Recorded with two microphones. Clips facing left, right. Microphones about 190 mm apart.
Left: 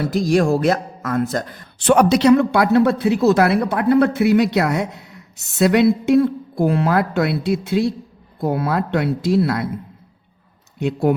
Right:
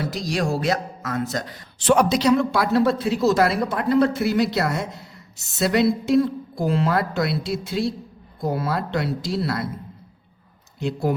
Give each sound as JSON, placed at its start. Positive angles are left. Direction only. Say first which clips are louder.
{"t": 0.0, "sound": "a man's voice", "louder": "left 8 dB", "side_deg": 55}
{"t": 10.8, "sound": "speech", "louder": "left 5 dB", "side_deg": 60}